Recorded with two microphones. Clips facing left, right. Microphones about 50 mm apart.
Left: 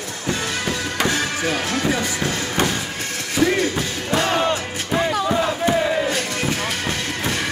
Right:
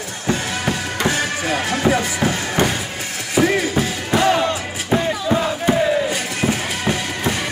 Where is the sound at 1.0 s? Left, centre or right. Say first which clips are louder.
Right 1 dB; centre.